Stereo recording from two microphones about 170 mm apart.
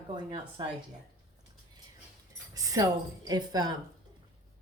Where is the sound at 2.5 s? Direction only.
20° right (ahead or behind).